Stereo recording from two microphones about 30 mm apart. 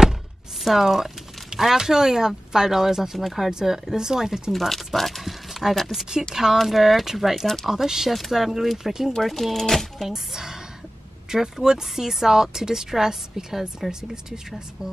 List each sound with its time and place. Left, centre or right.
0.7 s a woman's voice: centre
4.5 s a sound: centre
5.8 s speech: centre
6.3 s a woman's voice: centre
6.6 s a woman's voice: centre
9.1 s speech: centre
10.0 s a woman's voice: centre